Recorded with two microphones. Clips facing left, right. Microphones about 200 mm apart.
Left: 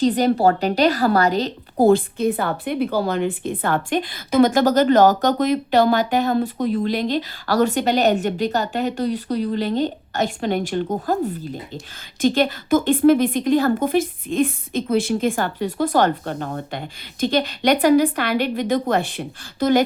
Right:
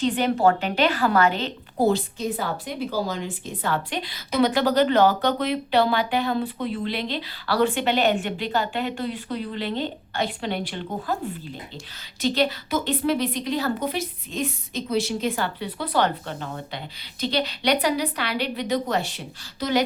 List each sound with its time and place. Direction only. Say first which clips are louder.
0.0 s a woman's voice: left 4 dB; 40° left (ahead or behind)
1.9 s a woman's voice: left 7 dB; 55° left (ahead or behind)